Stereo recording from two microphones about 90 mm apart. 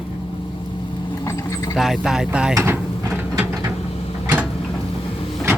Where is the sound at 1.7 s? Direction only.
Centre (ahead or behind).